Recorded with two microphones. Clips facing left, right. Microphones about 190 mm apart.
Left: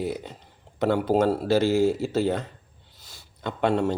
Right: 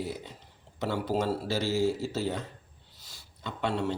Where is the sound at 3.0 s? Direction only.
55° left (ahead or behind).